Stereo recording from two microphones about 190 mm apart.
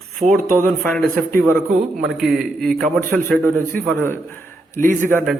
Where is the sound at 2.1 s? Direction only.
Centre (ahead or behind).